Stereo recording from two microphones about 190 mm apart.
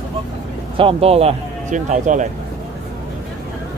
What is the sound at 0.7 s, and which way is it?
Speech, 30° right (ahead or behind).